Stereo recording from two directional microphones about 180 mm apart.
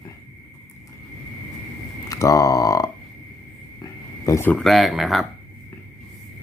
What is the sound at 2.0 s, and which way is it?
Speech, 20° left (ahead or behind).